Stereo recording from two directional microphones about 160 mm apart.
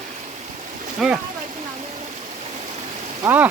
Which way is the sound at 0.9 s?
5° right (ahead or behind).